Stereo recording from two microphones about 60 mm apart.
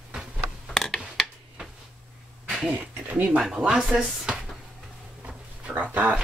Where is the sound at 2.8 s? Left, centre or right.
Right.